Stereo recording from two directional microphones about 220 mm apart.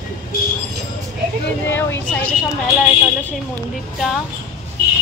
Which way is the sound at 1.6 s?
10° left (ahead or behind).